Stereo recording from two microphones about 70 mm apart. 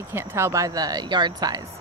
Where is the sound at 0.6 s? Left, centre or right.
Right.